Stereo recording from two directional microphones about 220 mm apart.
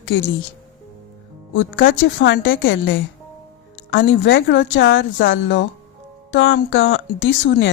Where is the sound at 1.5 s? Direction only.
60° left (ahead or behind).